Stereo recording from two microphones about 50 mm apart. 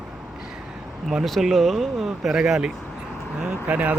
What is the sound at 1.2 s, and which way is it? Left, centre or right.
Speech, centre.